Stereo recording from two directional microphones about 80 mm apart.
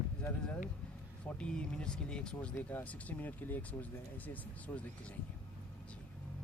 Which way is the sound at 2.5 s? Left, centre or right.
Left.